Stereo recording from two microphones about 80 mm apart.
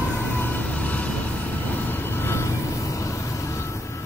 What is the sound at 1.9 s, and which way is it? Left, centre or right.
Vehicle, left.